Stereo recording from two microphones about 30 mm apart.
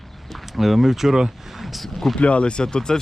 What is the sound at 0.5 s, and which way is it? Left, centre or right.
Speech, centre.